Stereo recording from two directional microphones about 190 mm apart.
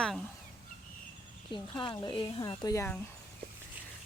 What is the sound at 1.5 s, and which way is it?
Speech, 25° left (ahead or behind).